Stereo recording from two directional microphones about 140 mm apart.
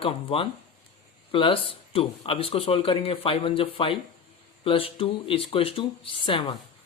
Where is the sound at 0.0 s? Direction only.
40° left (ahead or behind).